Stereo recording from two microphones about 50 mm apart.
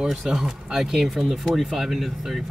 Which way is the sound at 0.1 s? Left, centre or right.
Centre.